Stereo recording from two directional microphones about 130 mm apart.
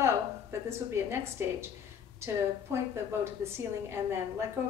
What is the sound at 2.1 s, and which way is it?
A woman's voice, 20° right (ahead or behind).